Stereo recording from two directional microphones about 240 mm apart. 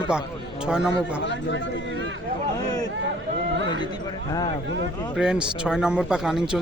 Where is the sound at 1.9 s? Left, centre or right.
Right.